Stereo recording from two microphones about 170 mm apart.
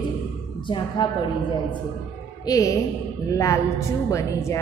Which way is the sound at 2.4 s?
20° left (ahead or behind).